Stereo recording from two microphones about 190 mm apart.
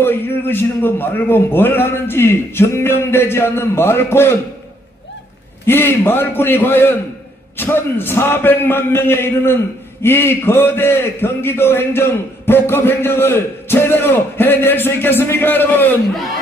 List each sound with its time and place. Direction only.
0.0 s a man's voice: 10° left (ahead or behind)
5.7 s a man's voice: 10° left (ahead or behind)